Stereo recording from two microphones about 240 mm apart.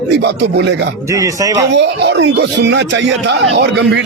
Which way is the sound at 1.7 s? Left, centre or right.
Right.